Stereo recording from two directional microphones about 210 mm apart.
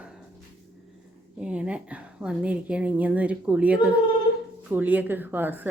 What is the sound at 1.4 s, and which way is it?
A woman's voice, 5° right (ahead or behind).